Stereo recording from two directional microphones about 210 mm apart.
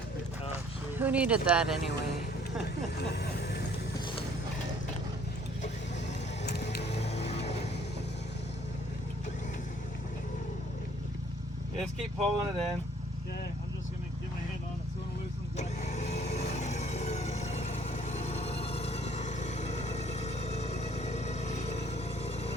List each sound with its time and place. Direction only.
0.9 s speech: 10° right (ahead or behind)
3.0 s vehicle: 50° left (ahead or behind)
6.8 s a sound: 30° left (ahead or behind)
12.2 s speech: centre (ahead or behind)
15.5 s vehicle: 30° left (ahead or behind)